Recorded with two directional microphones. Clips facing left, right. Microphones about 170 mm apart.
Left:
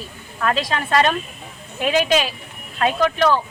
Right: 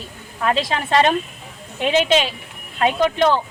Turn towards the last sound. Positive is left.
turn(degrees=-25)  # may be behind; listen again after turning